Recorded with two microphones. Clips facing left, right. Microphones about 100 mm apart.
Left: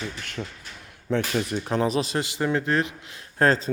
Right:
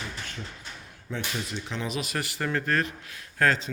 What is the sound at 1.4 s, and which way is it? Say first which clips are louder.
Speech: left 9 dB; 50° left (ahead or behind).